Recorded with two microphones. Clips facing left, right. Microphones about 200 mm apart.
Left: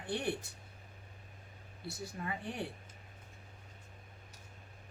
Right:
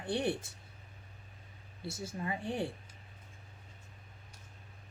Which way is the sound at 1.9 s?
25° right (ahead or behind).